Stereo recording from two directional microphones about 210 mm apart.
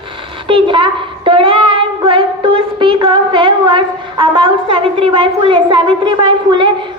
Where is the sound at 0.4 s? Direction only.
25° right (ahead or behind).